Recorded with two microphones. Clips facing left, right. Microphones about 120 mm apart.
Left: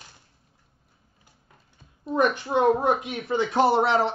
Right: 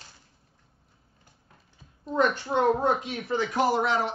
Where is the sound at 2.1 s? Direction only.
15° left (ahead or behind).